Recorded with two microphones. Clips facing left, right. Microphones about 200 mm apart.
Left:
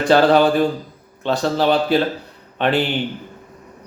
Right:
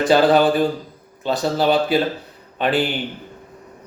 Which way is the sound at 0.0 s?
Centre (ahead or behind).